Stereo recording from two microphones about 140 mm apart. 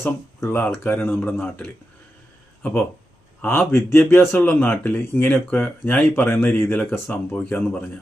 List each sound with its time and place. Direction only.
0.0 s speech: 20° left (ahead or behind)
3.4 s speech: 15° left (ahead or behind)